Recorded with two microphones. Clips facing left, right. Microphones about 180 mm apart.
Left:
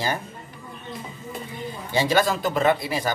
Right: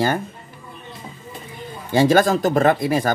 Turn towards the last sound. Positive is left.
turn(degrees=-50)  # may be behind; listen again after turning